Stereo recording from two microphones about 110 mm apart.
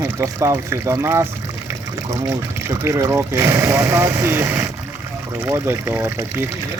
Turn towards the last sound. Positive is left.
turn(degrees=-25)  # may be behind; listen again after turning